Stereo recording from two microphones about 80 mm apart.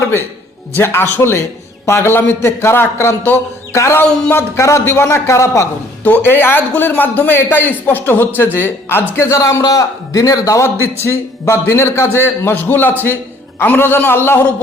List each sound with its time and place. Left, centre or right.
0.7 s a man's voice: left
4.0 s speech: centre
4.3 s a man's voice: left
6.0 s a man's voice: left